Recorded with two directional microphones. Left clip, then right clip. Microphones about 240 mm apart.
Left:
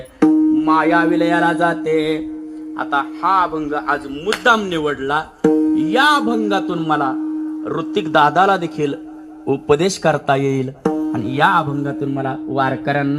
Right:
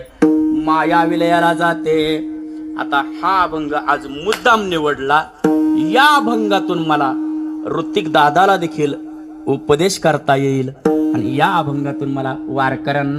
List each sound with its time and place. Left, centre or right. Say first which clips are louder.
0.2 s music: even; right
2.7 s speech: right 2 dB; right